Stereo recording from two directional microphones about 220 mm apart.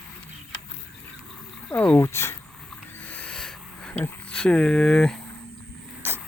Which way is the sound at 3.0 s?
5° left (ahead or behind).